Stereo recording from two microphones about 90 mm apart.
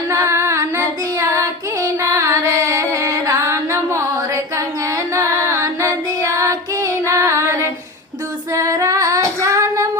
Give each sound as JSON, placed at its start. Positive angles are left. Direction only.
{"t": 0.1, "sound": "child singing", "side_deg": -30}
{"t": 5.1, "sound": "female singing", "side_deg": -30}